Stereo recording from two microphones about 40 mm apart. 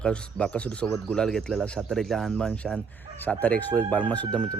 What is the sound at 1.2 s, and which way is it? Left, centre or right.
Speech, centre.